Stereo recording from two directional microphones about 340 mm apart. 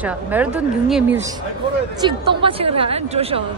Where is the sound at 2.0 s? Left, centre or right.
Centre.